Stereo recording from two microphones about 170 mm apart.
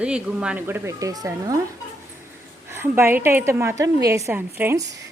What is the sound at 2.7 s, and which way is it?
A woman's voice, 15° right (ahead or behind).